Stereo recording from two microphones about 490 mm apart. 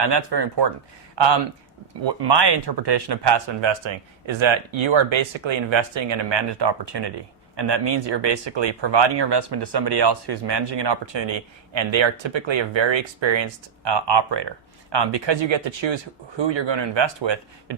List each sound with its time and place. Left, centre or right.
0.0 s speech: right